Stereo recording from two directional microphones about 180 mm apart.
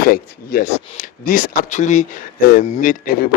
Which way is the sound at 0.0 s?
55° left (ahead or behind).